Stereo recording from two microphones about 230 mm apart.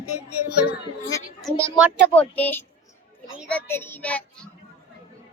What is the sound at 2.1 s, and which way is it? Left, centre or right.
Child singing, centre.